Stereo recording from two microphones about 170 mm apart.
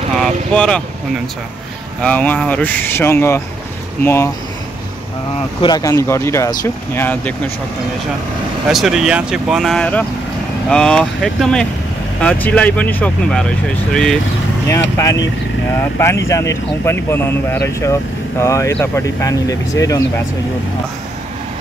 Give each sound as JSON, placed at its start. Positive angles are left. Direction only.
{"t": 0.1, "sound": "speech", "side_deg": 5}
{"t": 2.0, "sound": "speech", "side_deg": 10}
{"t": 5.6, "sound": "speech", "side_deg": 20}
{"t": 8.6, "sound": "speech", "side_deg": 0}
{"t": 15.8, "sound": "speech", "side_deg": 15}